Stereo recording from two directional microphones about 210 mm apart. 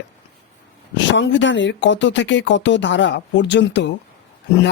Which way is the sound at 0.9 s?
60° left (ahead or behind).